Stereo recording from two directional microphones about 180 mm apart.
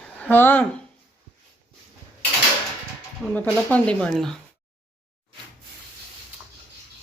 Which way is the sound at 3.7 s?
5° left (ahead or behind).